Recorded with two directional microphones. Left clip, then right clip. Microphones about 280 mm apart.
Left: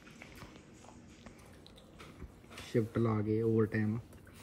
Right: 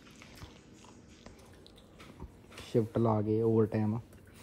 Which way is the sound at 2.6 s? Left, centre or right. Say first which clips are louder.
Right 3 dB; centre.